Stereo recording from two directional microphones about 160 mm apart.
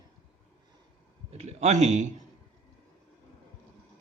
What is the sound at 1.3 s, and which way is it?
Speech, 40° right (ahead or behind).